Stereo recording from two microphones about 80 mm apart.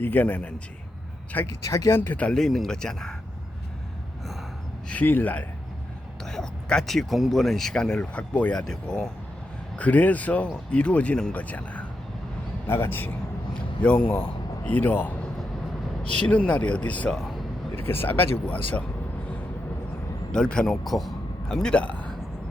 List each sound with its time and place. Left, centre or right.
0.0 s speech: left
1.5 s speech: left
2.0 s speech: left
2.4 s speech: centre
4.9 s speech: left
6.2 s speech: centre
9.7 s speech: centre
12.6 s a man's voice: left
13.5 s a man's voice: centre
16.2 s speech: centre
17.7 s speech: left
20.3 s a man's voice: centre